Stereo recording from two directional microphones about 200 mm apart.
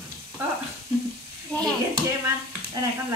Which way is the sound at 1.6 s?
20° right (ahead or behind).